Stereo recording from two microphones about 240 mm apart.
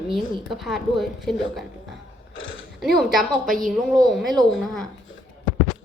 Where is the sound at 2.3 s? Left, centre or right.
Left.